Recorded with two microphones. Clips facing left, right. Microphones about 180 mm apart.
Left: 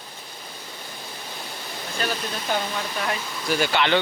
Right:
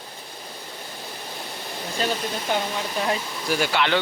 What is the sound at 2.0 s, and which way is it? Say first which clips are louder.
Speech: right 2 dB; 20° right (ahead or behind).